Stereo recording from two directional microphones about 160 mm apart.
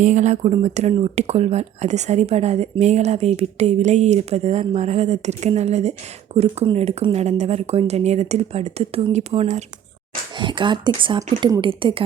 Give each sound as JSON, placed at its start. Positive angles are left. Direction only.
{"t": 0.0, "sound": "speech", "side_deg": -50}
{"t": 10.3, "sound": "speech", "side_deg": -30}